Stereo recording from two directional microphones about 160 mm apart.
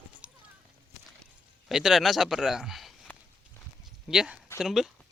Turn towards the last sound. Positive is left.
turn(degrees=-5)  # may be behind; listen again after turning